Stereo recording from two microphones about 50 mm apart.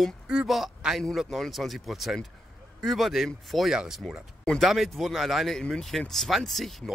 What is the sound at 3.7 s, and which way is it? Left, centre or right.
Speech, centre.